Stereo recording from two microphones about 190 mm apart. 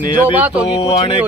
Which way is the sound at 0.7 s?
30° left (ahead or behind).